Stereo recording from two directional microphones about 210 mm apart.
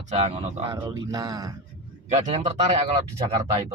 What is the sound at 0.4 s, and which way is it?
Speech, 25° right (ahead or behind).